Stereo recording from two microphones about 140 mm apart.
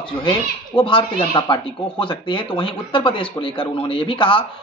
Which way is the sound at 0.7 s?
35° left (ahead or behind).